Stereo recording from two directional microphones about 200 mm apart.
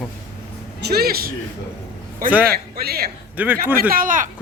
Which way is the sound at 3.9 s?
45° right (ahead or behind).